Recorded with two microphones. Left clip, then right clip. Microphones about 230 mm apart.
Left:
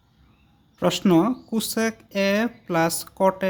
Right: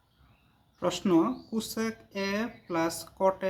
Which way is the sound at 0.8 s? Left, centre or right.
Left.